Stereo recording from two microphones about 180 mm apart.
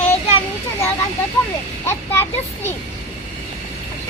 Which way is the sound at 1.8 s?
10° left (ahead or behind).